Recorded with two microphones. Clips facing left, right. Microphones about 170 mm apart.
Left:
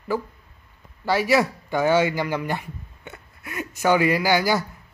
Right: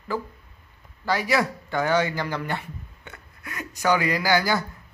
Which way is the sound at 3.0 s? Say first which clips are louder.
Left 3 dB; 20° left (ahead or behind).